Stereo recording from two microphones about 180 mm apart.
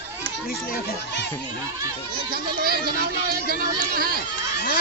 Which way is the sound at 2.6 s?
60° right (ahead or behind).